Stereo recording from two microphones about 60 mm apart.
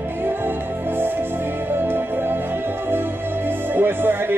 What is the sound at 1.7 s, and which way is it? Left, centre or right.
Music, right.